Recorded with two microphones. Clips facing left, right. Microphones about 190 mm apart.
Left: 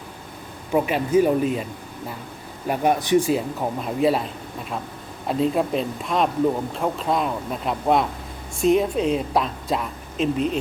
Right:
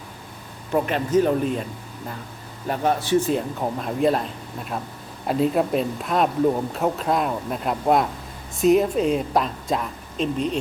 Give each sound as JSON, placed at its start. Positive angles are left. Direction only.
{"t": 0.7, "sound": "speech", "side_deg": 10}
{"t": 2.6, "sound": "speech", "side_deg": 15}
{"t": 3.3, "sound": "speech", "side_deg": 0}